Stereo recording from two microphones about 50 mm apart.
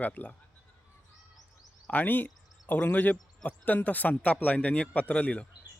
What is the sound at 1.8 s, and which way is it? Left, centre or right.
Speech, left.